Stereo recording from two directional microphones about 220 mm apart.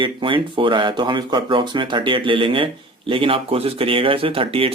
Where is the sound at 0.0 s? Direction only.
20° right (ahead or behind).